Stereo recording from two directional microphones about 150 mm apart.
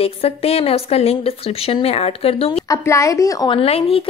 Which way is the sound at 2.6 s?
20° left (ahead or behind).